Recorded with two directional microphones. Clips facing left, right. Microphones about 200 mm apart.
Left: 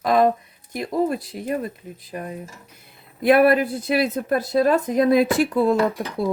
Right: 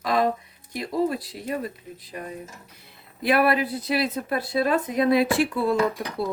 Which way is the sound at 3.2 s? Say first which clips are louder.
Left 6 dB; 50° left (ahead or behind).